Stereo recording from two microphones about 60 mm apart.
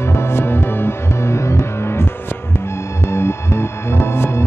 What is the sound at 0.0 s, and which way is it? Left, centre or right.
Music, left.